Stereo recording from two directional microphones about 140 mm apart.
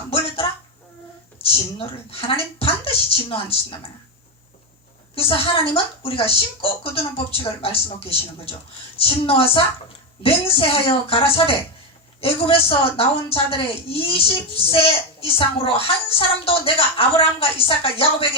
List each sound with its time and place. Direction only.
1.4 s a woman's voice: 40° left (ahead or behind)
5.1 s a woman's voice: 40° left (ahead or behind)